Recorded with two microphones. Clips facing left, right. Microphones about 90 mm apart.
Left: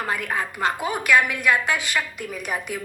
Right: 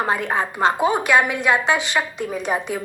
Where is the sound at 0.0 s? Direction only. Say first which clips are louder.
Right 5 dB; 25° right (ahead or behind).